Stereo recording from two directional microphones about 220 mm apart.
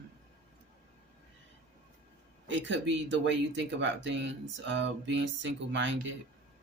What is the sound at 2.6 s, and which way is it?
Speech, 55° right (ahead or behind).